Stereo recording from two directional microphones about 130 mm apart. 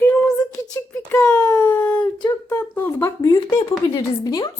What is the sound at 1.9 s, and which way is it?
A woman's voice, 25° left (ahead or behind).